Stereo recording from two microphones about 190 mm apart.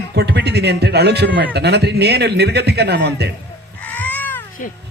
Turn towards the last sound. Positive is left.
turn(degrees=45)  # may be behind; listen again after turning